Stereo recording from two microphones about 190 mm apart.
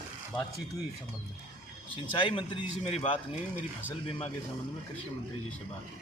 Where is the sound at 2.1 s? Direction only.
25° left (ahead or behind).